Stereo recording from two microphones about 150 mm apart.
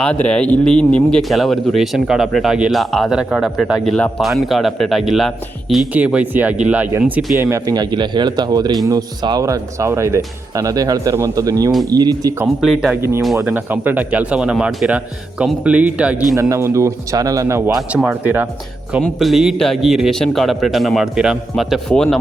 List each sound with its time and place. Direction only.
0.0 s speech: 5° left (ahead or behind); by 12.3 s 25° right (ahead or behind)
12.6 s speech: 5° right (ahead or behind)
13.0 s speech: 15° right (ahead or behind)
16.3 s speech: 20° right (ahead or behind)
17.7 s speech: 5° right (ahead or behind)